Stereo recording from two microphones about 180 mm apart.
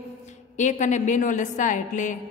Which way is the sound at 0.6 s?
40° left (ahead or behind).